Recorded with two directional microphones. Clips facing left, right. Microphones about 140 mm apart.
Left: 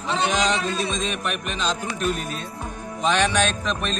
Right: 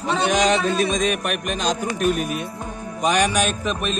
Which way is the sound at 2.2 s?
15° right (ahead or behind).